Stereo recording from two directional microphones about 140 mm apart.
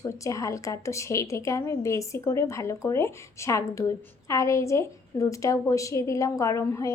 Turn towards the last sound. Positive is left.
turn(degrees=20)  # may be behind; listen again after turning